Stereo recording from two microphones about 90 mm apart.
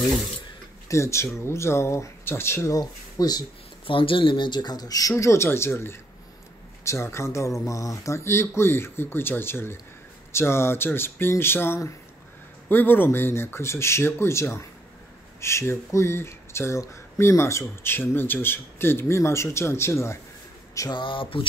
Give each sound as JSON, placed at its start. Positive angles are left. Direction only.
{"t": 0.8, "sound": "speech", "side_deg": 35}
{"t": 2.7, "sound": "speech", "side_deg": 45}
{"t": 3.8, "sound": "speech", "side_deg": 80}
{"t": 5.1, "sound": "speech", "side_deg": 30}
{"t": 20.9, "sound": "a sound", "side_deg": 65}